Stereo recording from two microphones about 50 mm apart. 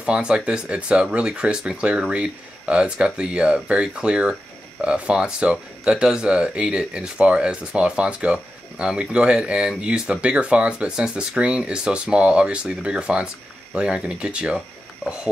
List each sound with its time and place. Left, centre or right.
0.0 s speech: centre